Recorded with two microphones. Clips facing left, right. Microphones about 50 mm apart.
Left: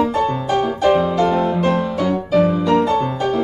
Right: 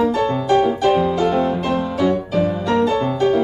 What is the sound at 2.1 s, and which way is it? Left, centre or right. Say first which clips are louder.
Music: left 3 dB; left.